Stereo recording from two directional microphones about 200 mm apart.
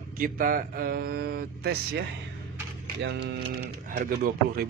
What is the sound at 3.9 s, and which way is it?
Speech, 45° right (ahead or behind).